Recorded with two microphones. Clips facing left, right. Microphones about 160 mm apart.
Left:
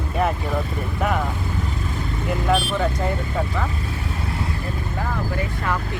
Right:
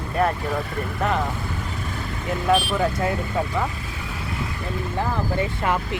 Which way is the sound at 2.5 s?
5° right (ahead or behind).